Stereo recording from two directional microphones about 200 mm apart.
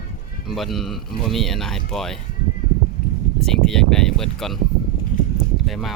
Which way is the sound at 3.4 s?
5° left (ahead or behind).